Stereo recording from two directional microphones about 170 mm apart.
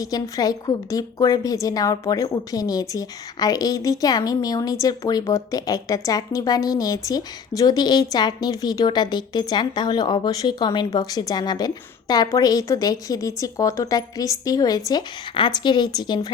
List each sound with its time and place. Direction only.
0.0 s a woman's voice: 20° left (ahead or behind)